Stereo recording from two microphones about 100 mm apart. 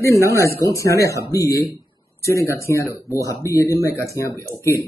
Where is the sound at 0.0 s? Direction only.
30° left (ahead or behind).